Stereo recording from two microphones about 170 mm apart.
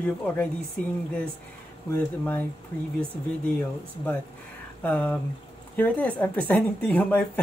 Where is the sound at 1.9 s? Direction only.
10° left (ahead or behind).